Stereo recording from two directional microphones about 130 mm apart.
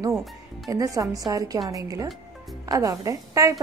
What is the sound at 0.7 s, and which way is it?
A woman's voice, 25° right (ahead or behind).